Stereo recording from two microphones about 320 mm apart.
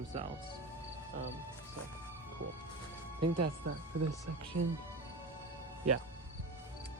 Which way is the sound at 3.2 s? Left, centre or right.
Right.